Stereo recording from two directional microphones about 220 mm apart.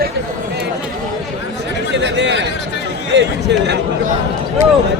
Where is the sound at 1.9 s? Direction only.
55° right (ahead or behind).